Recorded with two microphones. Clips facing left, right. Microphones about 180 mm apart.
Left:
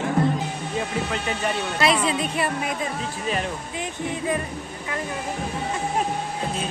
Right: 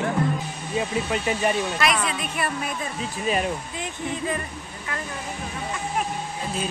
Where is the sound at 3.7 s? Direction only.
15° left (ahead or behind).